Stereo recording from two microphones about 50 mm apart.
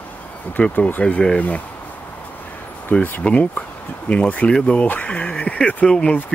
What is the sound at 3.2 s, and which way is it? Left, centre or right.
Speech, left.